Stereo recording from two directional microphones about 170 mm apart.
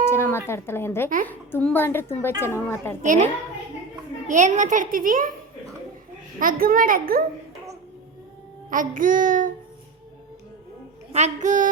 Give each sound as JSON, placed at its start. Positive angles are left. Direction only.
{"t": 0.0, "sound": "a sound", "side_deg": 15}
{"t": 0.4, "sound": "a woman's voice", "side_deg": 15}
{"t": 4.3, "sound": "a child's voice", "side_deg": -45}
{"t": 6.4, "sound": "a child's voice", "side_deg": -55}
{"t": 8.7, "sound": "a child's voice", "side_deg": -50}
{"t": 11.1, "sound": "a child's voice", "side_deg": -45}